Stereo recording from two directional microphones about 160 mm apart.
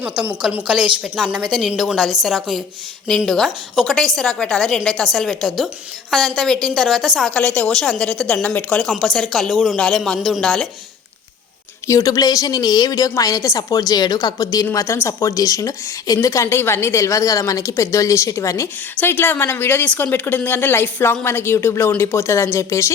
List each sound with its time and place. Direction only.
0.0 s a woman's voice: 10° right (ahead or behind)
11.9 s a woman's voice: 20° left (ahead or behind)